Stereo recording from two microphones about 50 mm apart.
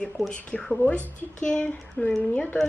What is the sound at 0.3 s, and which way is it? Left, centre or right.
Speech, centre.